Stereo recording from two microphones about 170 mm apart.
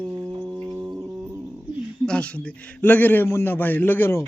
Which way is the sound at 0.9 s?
10° right (ahead or behind).